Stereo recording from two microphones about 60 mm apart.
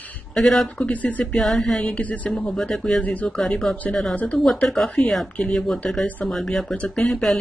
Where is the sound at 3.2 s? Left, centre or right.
Centre.